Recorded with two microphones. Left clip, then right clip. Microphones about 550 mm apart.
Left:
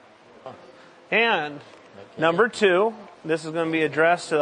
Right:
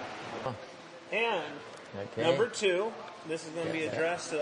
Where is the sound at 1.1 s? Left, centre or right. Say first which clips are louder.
Left 10 dB; left.